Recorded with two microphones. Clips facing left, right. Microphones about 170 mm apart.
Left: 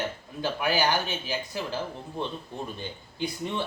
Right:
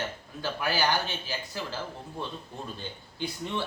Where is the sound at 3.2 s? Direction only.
15° left (ahead or behind).